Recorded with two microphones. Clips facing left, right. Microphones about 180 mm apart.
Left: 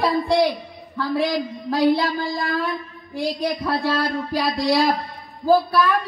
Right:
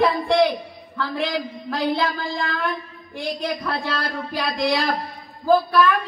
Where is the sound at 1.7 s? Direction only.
35° left (ahead or behind).